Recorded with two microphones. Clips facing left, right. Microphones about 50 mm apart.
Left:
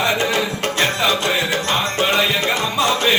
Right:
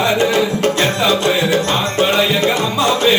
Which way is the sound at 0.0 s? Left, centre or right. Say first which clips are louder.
Right 4 dB; left.